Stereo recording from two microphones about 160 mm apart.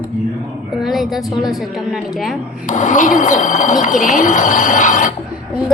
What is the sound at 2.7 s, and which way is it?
Speech, 50° left (ahead or behind).